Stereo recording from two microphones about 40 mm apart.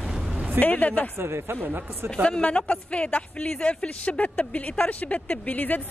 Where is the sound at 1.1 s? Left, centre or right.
Right.